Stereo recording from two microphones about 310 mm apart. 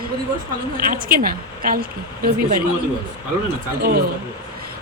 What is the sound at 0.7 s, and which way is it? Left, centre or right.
Speech, right.